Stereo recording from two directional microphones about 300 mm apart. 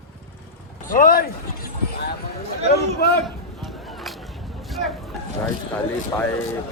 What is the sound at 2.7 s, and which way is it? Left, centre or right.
Speech, left.